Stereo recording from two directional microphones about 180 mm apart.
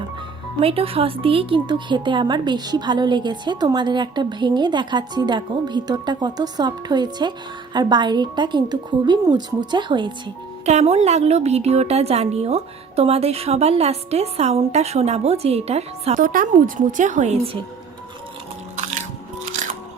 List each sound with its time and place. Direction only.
0.6 s a woman's voice: 30° right (ahead or behind)
10.7 s a woman's voice: 35° right (ahead or behind)
16.1 s a woman's voice: 50° right (ahead or behind); by 17.6 s 35° right (ahead or behind)